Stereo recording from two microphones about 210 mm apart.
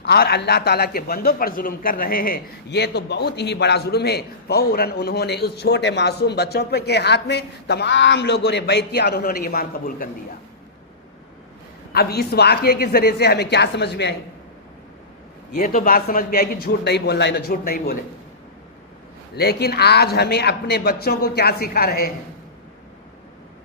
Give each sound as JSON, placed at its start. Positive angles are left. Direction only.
{"t": 0.1, "sound": "a man's voice", "side_deg": 50}
{"t": 11.9, "sound": "a man's voice", "side_deg": 50}
{"t": 15.5, "sound": "a man's voice", "side_deg": 40}
{"t": 19.4, "sound": "a man's voice", "side_deg": 50}